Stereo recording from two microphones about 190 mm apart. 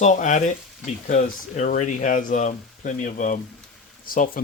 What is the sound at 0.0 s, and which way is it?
Speech, 40° left (ahead or behind).